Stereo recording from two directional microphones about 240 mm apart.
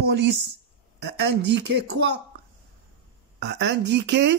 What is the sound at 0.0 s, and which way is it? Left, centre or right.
Speech, right.